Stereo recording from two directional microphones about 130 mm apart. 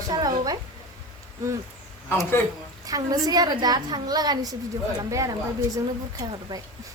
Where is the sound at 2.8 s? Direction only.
30° right (ahead or behind).